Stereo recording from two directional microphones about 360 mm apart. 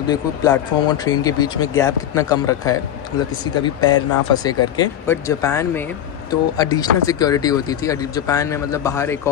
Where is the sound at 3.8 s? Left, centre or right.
Left.